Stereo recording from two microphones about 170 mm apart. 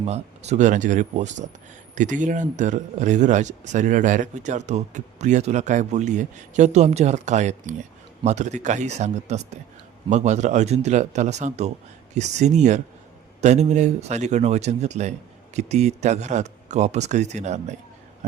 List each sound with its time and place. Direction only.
0.0 s speech: 40° right (ahead or behind)